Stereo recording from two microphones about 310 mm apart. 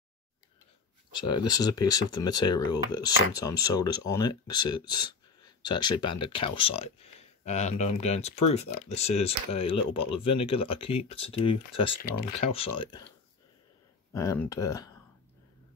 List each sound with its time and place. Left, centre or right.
1.3 s speech: centre
14.1 s speech: centre